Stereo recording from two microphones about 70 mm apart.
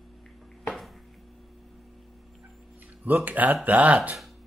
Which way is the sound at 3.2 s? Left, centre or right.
Right.